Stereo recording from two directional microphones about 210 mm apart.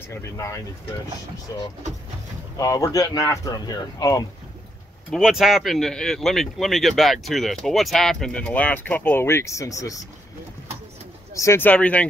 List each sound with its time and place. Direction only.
0.1 s speech: 15° left (ahead or behind)
2.5 s speech: 15° left (ahead or behind)
5.1 s speech: centre (ahead or behind); by 9.9 s 15° left (ahead or behind)
11.3 s speech: 10° left (ahead or behind)